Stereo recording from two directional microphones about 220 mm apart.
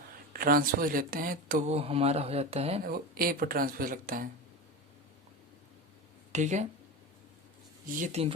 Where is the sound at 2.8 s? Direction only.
40° right (ahead or behind).